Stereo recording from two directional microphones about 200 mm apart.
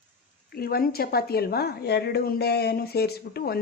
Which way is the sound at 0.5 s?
50° left (ahead or behind).